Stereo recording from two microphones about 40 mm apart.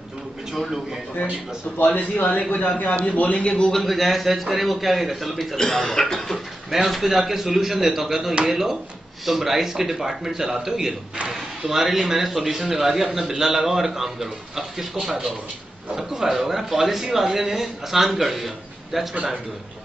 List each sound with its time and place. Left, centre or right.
2.0 s a man's voice: left
3.7 s a man's voice: centre
5.6 s a sound: centre
6.7 s a man's voice: centre
11.1 s a man's voice: right
11.7 s a man's voice: centre
16.4 s a man's voice: centre